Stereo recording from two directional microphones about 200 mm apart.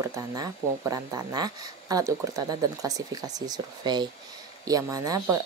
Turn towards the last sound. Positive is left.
turn(degrees=-15)  # may be behind; listen again after turning